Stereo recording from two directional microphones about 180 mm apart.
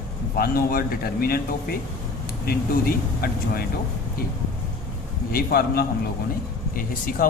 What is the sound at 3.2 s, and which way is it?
Speech, 60° left (ahead or behind).